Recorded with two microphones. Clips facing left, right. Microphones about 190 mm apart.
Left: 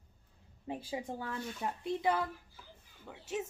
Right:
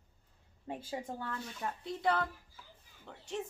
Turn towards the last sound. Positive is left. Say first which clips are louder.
# left 2 dB
turn(degrees=5)  # may be behind; listen again after turning